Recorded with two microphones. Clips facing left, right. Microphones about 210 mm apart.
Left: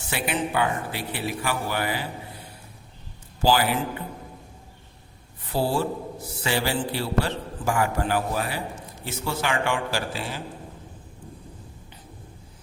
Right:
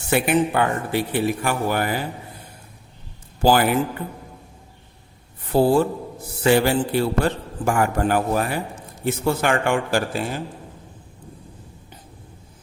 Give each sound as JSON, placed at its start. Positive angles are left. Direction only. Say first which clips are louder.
{"t": 0.1, "sound": "a man's voice", "louder": "right 8 dB", "side_deg": -50}
{"t": 3.4, "sound": "a man's voice", "louder": "right 5 dB", "side_deg": -50}
{"t": 5.5, "sound": "a man's voice", "louder": "right 8 dB", "side_deg": -55}